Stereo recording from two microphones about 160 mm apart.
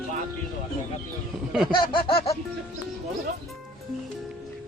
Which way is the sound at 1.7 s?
30° left (ahead or behind).